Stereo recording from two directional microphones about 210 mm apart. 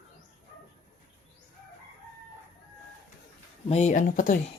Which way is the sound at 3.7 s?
30° left (ahead or behind).